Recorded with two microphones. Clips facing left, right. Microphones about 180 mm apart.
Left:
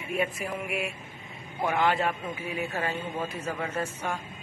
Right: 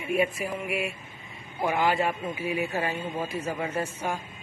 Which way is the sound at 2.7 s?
10° right (ahead or behind).